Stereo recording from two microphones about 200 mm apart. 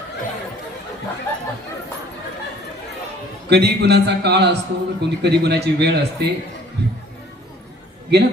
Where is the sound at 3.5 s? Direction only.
55° right (ahead or behind).